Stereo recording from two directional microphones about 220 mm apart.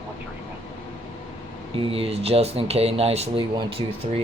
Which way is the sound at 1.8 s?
25° right (ahead or behind).